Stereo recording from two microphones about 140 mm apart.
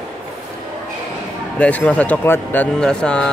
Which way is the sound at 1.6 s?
10° left (ahead or behind).